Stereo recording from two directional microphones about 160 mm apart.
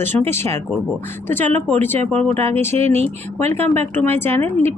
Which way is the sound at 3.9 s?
15° left (ahead or behind).